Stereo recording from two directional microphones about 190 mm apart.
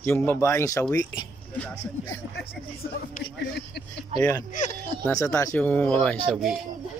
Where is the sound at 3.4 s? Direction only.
60° left (ahead or behind).